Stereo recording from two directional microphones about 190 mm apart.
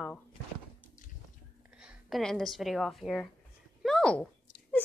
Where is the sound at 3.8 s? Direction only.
5° left (ahead or behind).